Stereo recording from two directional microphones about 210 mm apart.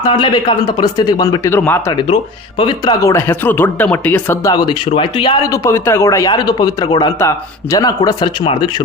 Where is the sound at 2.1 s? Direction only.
25° left (ahead or behind).